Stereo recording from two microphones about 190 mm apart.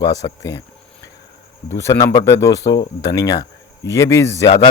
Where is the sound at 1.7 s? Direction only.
15° left (ahead or behind).